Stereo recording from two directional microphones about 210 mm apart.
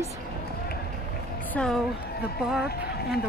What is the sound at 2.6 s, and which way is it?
Speech, 50° left (ahead or behind).